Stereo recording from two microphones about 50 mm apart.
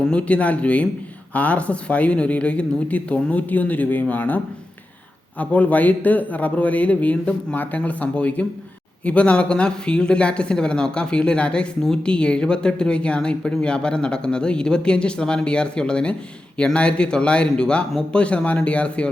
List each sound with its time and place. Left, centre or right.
0.0 s a man's voice: left
5.4 s a man's voice: left